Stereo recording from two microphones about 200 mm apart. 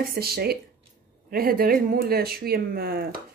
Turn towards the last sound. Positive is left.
turn(degrees=-50)  # may be behind; listen again after turning